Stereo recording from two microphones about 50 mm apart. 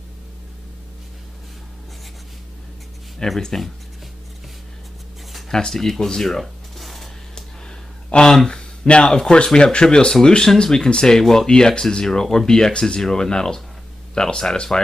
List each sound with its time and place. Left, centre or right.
3.2 s speech: centre
5.5 s speech: centre
6.4 s a sound: centre
7.3 s speech: centre